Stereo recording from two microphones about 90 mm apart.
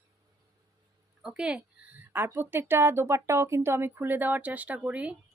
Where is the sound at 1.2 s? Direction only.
10° right (ahead or behind).